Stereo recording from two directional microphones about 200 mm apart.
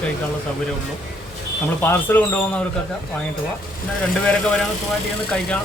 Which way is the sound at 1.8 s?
10° left (ahead or behind).